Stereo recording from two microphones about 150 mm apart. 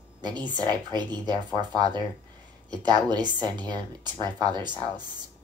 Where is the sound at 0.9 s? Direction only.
30° right (ahead or behind).